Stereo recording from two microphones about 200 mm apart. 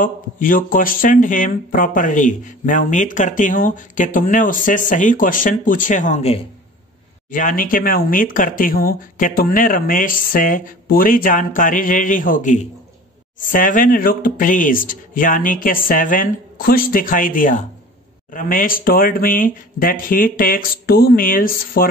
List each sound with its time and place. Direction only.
0.0 s speech: 45° left (ahead or behind)